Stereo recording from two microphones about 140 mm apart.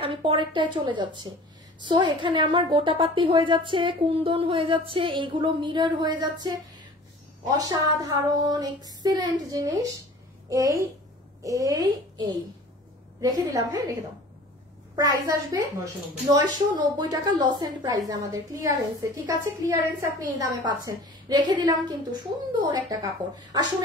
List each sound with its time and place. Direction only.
0.0 s a woman's voice: 40° right (ahead or behind)
15.0 s a woman's voice: 25° right (ahead or behind)